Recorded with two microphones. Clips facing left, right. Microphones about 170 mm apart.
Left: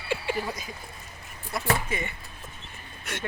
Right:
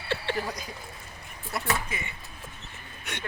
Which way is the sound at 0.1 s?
5° left (ahead or behind).